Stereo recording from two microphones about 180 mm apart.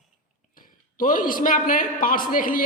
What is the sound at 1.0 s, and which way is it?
A man's voice, 50° left (ahead or behind).